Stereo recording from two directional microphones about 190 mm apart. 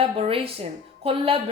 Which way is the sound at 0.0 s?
30° right (ahead or behind).